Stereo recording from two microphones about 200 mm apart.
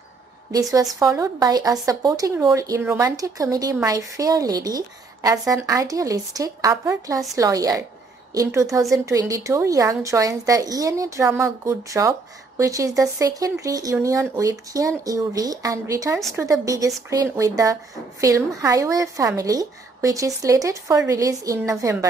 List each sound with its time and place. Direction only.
0.5 s speech: 20° right (ahead or behind)